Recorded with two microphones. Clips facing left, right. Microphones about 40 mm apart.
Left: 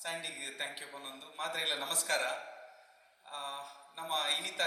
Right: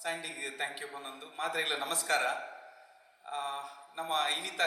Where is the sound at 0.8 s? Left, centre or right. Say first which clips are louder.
Right 4 dB; right.